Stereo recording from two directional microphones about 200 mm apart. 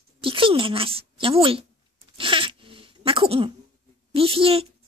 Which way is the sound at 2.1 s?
25° right (ahead or behind).